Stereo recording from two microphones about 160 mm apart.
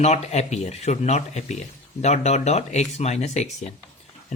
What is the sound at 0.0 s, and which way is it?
Speech, 45° left (ahead or behind).